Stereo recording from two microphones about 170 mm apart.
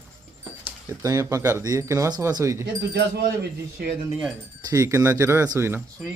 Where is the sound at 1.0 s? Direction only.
20° right (ahead or behind).